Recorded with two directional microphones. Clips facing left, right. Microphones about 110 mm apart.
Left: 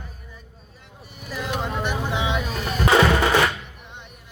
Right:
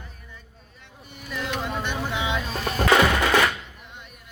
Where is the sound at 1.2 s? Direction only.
25° left (ahead or behind).